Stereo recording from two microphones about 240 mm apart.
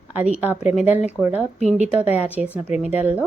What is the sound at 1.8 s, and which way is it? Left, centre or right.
A woman's voice, centre.